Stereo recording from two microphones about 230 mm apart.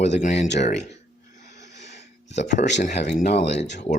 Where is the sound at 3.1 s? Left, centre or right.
Left.